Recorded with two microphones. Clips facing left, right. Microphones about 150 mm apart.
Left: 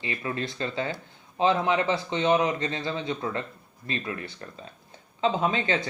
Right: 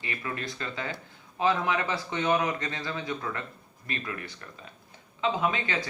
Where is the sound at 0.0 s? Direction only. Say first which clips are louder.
Left 4 dB; 25° left (ahead or behind).